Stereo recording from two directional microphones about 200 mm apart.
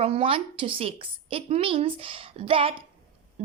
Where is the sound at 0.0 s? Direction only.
30° right (ahead or behind).